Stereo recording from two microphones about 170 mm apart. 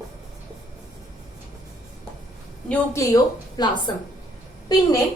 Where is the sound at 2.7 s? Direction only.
20° left (ahead or behind).